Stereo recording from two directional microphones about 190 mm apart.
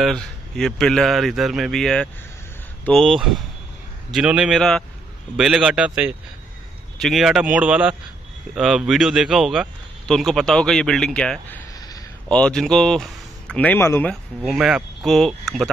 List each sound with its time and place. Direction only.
0.0 s speech: 5° left (ahead or behind)
14.4 s speech: centre (ahead or behind)